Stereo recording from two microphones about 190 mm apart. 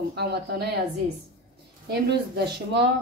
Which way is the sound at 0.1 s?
60° right (ahead or behind).